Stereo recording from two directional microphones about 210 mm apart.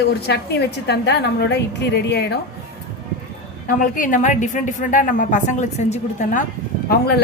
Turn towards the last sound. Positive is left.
turn(degrees=45)  # may be behind; listen again after turning